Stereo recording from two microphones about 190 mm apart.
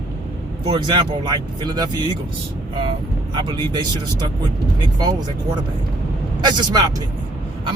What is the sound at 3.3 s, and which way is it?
Speech, 25° right (ahead or behind).